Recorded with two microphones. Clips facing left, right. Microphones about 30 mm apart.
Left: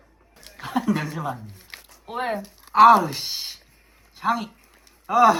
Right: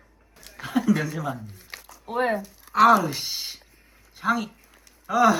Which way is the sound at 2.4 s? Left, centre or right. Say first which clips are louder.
Left 7 dB; left.